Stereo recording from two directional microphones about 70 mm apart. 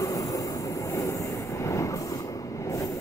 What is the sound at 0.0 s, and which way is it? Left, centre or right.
Train, left.